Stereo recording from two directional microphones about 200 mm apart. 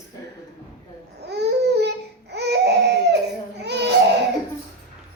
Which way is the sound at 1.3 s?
55° right (ahead or behind).